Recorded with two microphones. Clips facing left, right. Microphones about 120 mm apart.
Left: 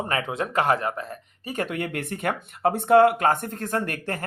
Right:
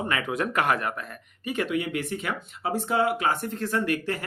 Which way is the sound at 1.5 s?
45° left (ahead or behind).